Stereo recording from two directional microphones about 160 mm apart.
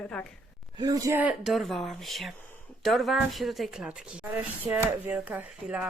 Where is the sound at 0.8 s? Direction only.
20° right (ahead or behind).